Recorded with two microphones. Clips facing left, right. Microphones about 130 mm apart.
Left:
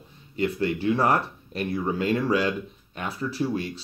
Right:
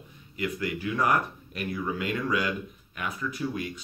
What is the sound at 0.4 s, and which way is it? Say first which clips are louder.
Speech: left 6 dB; 30° left (ahead or behind).